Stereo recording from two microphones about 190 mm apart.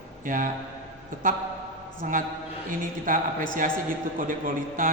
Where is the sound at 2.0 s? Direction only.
45° right (ahead or behind).